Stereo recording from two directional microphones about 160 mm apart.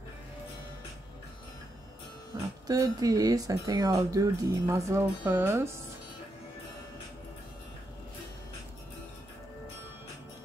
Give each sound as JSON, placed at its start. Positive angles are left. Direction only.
{"t": 2.6, "sound": "speech", "side_deg": -25}